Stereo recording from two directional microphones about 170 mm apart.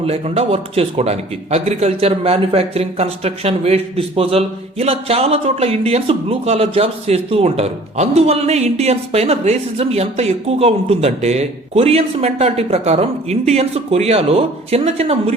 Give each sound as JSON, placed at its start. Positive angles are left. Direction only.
{"t": 0.0, "sound": "speech", "side_deg": -35}